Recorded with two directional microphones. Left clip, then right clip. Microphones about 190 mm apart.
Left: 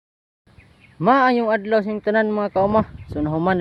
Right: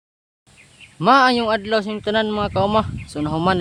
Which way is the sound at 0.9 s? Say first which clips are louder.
Right 2 dB; 5° right (ahead or behind).